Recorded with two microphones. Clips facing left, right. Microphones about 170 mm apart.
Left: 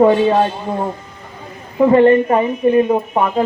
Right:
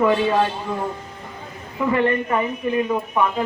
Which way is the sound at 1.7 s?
35° left (ahead or behind).